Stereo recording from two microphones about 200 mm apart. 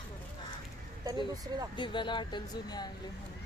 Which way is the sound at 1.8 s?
25° left (ahead or behind).